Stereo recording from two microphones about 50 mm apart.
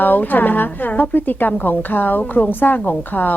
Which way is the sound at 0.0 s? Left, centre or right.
Left.